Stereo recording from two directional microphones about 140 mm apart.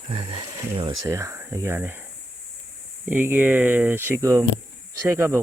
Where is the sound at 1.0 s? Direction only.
20° right (ahead or behind).